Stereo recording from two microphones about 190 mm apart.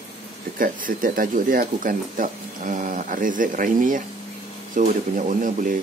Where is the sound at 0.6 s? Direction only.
45° right (ahead or behind).